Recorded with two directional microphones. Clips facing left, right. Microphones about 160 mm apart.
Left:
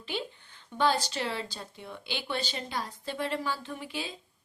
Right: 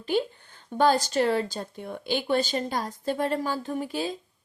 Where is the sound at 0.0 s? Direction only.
45° right (ahead or behind).